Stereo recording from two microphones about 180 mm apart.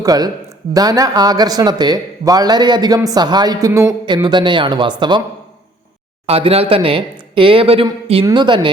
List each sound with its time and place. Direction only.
0.0 s speech: 20° right (ahead or behind)
6.2 s speech: 35° right (ahead or behind)